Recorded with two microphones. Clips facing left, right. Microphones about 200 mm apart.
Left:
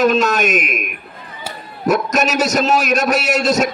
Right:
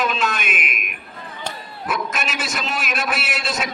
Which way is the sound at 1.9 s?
40° left (ahead or behind).